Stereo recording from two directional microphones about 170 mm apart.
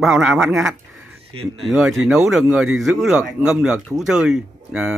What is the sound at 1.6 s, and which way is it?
Speech, 5° right (ahead or behind).